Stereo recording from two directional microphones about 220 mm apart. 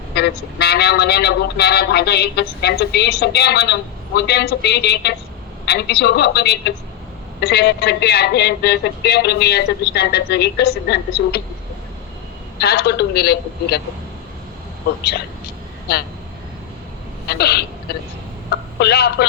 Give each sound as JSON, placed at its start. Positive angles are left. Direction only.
{"t": 0.1, "sound": "speech", "side_deg": 45}
{"t": 12.5, "sound": "speech", "side_deg": 45}
{"t": 17.2, "sound": "speech", "side_deg": 45}
{"t": 18.5, "sound": "telephone", "side_deg": 45}